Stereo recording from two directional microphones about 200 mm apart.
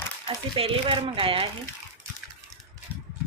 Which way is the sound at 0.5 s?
25° right (ahead or behind).